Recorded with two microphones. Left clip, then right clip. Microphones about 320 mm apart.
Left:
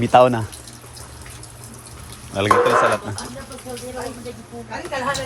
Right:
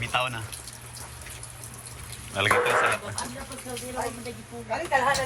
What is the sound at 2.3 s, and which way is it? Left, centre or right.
Speech, centre.